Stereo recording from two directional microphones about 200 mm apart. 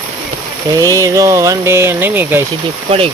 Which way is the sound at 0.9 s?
15° right (ahead or behind).